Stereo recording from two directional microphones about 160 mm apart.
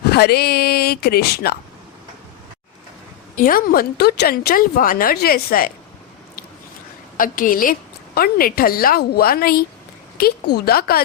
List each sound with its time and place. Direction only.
0.0 s speech: 85° left
3.3 s a woman's voice: 60° left (ahead or behind)
7.2 s a woman's voice: 60° left (ahead or behind)